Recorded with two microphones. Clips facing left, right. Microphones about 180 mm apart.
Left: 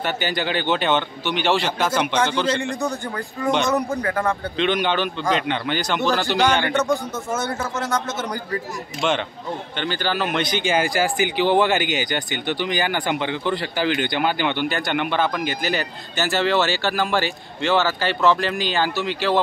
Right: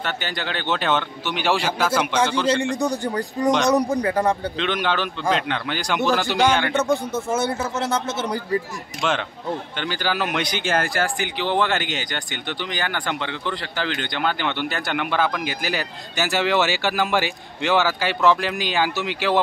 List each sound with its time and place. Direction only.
0.0 s a man's voice: 5° left (ahead or behind)
2.9 s speech: 35° right (ahead or behind)
3.7 s speech: 15° right (ahead or behind)
4.6 s a man's voice: centre (ahead or behind)
6.9 s a man's voice: 30° right (ahead or behind)
9.8 s a man's voice: 10° right (ahead or behind)